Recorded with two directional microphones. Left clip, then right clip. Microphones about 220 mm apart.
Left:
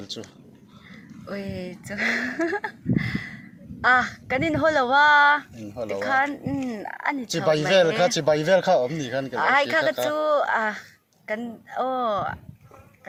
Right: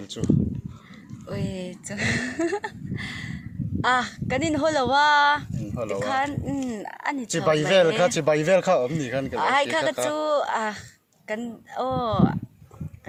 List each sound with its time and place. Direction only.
1.3 s speech: 45° right (ahead or behind)
7.3 s speech: 35° right (ahead or behind)
9.4 s speech: 50° right (ahead or behind)
9.9 s speech: 40° right (ahead or behind)